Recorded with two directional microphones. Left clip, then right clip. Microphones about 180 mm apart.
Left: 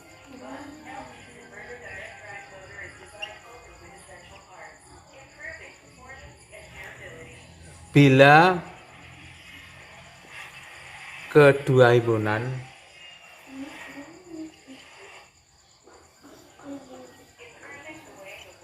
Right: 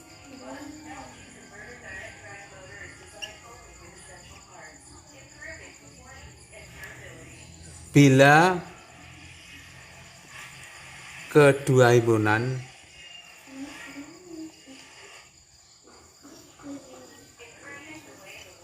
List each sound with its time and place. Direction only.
7.9 s speech: 5° right (ahead or behind)
11.3 s a man's voice: 5° right (ahead or behind)
12.1 s a man's voice: 30° right (ahead or behind)